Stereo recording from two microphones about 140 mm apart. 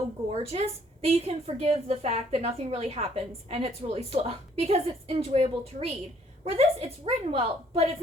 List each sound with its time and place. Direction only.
0.3 s a woman's voice: 50° right (ahead or behind)